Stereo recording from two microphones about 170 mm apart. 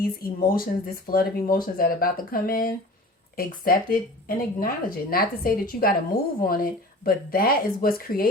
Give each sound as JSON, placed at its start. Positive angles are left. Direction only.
{"t": 0.0, "sound": "speech", "side_deg": 60}